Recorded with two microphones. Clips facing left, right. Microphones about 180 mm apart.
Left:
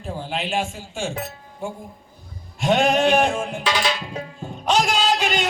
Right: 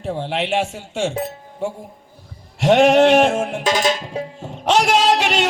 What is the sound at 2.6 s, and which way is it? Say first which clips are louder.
Music: right 6 dB; 85° right.